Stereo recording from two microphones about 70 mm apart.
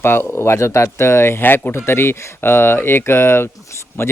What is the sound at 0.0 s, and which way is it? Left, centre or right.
Speech, left.